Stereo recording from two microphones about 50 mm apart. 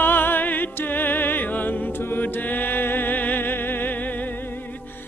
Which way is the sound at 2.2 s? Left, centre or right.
Left.